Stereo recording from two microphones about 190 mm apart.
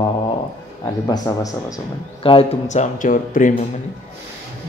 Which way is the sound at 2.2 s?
30° left (ahead or behind).